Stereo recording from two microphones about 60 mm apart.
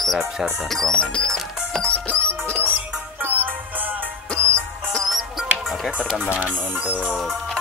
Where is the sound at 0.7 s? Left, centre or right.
Centre.